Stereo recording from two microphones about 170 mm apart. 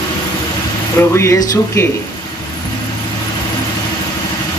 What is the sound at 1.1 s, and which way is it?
Speech, 15° left (ahead or behind).